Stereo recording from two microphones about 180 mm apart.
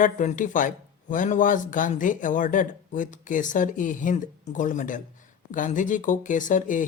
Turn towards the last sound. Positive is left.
turn(degrees=45)  # may be behind; listen again after turning